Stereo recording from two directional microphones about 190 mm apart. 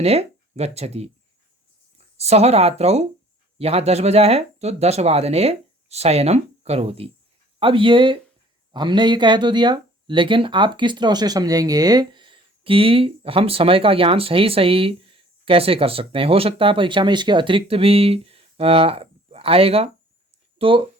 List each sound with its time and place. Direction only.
0.0 s speech: 35° right (ahead or behind)